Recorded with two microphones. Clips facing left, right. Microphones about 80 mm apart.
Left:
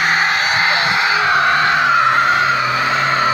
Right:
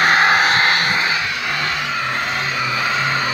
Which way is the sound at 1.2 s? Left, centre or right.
Left.